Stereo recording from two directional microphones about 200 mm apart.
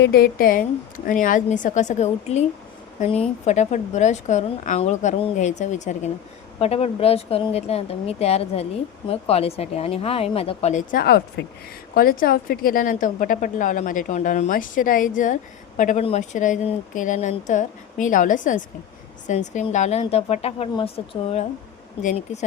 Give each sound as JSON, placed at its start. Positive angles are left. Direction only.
{"t": 0.0, "sound": "a woman's voice", "side_deg": 50}
{"t": 11.0, "sound": "a woman's voice", "side_deg": 50}